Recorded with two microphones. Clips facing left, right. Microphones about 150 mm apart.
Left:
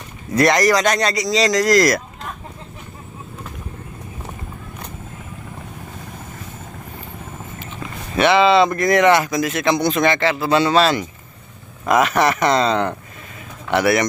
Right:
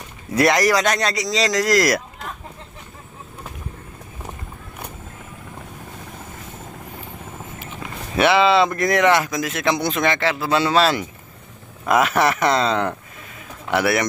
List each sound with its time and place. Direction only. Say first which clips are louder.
0.3 s speech: left 2 dB; 5° right (ahead or behind)
7.5 s speech: left 1 dB; 5° right (ahead or behind)